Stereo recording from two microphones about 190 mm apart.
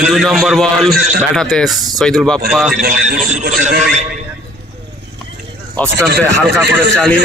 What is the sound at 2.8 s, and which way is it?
Speech, 50° right (ahead or behind).